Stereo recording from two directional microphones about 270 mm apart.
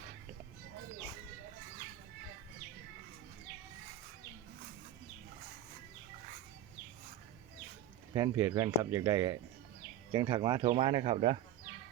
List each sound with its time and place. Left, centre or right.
8.1 s speech: centre